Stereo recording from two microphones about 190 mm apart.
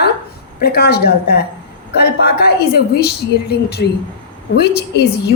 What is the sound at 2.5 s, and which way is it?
A woman's voice, 55° left (ahead or behind).